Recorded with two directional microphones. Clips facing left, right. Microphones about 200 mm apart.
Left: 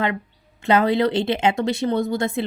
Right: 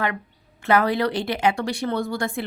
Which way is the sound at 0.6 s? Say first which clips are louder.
Left 2 dB; 20° left (ahead or behind).